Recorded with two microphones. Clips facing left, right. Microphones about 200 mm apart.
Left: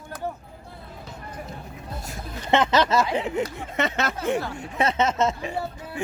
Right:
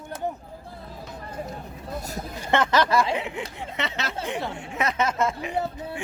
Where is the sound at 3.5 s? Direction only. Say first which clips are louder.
Left 5 dB; 50° left (ahead or behind).